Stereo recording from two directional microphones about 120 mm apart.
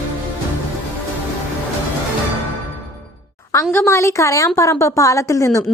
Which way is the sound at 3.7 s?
20° left (ahead or behind).